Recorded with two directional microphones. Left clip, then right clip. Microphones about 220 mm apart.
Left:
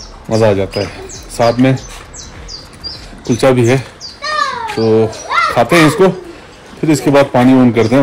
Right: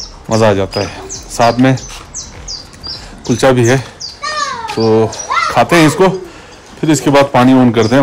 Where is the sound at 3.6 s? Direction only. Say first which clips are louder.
Right 1 dB; 25° right (ahead or behind).